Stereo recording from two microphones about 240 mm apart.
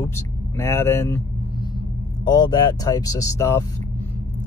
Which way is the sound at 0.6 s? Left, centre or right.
Centre.